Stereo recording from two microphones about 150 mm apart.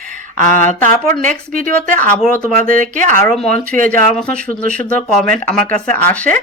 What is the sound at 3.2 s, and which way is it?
Speech, 5° left (ahead or behind).